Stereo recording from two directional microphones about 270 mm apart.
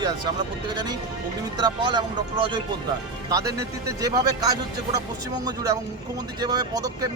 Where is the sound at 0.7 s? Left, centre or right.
Centre.